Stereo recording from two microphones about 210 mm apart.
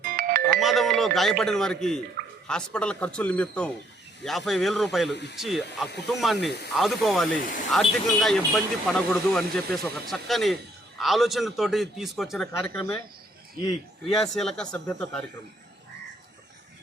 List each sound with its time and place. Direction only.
0.0 s music: 45° right (ahead or behind)
0.6 s speech: centre (ahead or behind)
2.2 s a sound: 40° right (ahead or behind)
2.5 s speech: 5° left (ahead or behind)
5.1 s speech: 55° left (ahead or behind)
5.4 s speech: centre (ahead or behind)
12.5 s speech: 15° left (ahead or behind)
14.1 s speech: centre (ahead or behind)